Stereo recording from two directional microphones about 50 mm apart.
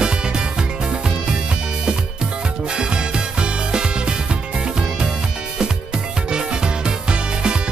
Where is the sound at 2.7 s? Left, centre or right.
Centre.